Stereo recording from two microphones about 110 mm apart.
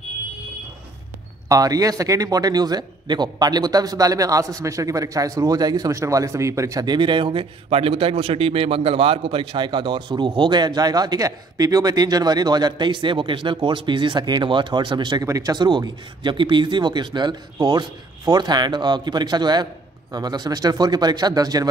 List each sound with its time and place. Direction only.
1.5 s a man's voice: 35° right (ahead or behind)
6.9 s a man's voice: 45° right (ahead or behind)